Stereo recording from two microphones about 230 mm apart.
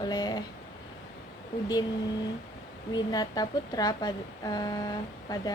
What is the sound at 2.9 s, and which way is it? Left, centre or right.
A woman's voice, centre.